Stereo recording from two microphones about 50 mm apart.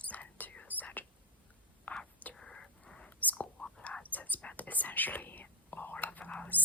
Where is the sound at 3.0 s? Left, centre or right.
Left.